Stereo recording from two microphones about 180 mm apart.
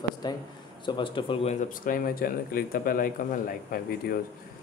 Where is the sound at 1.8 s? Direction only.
50° left (ahead or behind).